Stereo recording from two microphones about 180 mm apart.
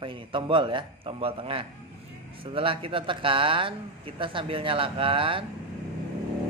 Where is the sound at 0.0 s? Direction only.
30° right (ahead or behind).